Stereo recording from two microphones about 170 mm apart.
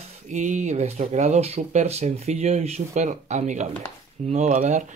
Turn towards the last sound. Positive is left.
turn(degrees=-45)  # may be behind; listen again after turning